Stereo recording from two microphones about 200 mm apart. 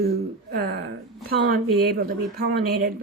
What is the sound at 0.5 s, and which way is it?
Speech, 50° right (ahead or behind).